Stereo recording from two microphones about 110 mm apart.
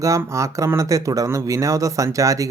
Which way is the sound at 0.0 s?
30° right (ahead or behind).